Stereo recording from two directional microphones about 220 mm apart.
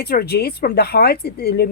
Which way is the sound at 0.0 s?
45° left (ahead or behind).